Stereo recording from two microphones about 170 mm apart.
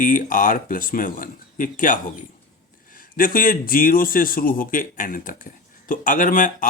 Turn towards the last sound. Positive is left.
turn(degrees=50)  # may be behind; listen again after turning